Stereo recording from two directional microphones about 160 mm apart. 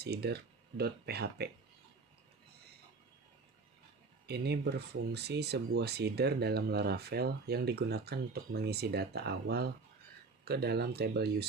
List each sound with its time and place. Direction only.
0.0 s speech: 90° right
4.3 s speech: 90° right